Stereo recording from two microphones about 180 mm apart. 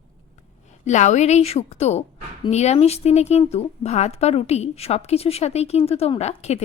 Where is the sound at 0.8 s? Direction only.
40° left (ahead or behind).